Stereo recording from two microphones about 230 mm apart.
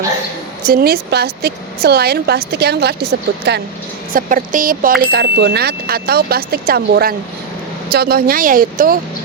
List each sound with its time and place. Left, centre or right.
0.6 s a woman's voice: right
4.1 s speech: right